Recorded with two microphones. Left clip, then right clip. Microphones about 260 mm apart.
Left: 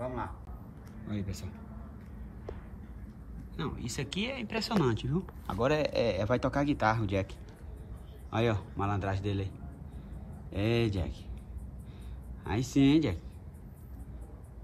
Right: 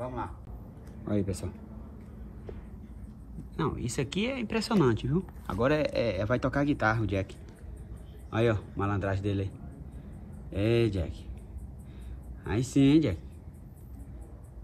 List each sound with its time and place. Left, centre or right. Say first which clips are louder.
0.0 s a sound: right 1 dB; centre
1.0 s speech: right 10 dB; centre
3.5 s speech: right 6 dB; centre
10.5 s speech: right 4 dB; centre